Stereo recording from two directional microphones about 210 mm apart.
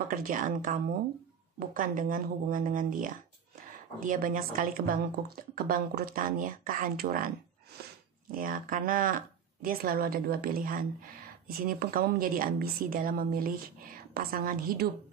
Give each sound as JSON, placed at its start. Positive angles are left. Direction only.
{"t": 0.1, "sound": "a woman's voice", "side_deg": -40}